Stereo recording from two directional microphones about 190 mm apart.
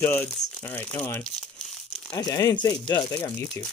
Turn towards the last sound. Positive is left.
turn(degrees=15)  # may be behind; listen again after turning